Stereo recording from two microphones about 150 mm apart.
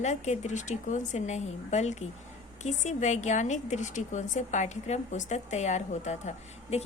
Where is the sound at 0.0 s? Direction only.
55° left (ahead or behind).